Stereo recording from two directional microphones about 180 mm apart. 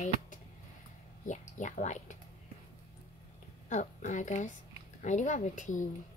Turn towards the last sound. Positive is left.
turn(degrees=45)  # may be behind; listen again after turning